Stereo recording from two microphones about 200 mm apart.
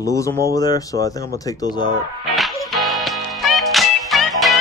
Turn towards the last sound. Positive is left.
turn(degrees=0)  # may be behind; listen again after turning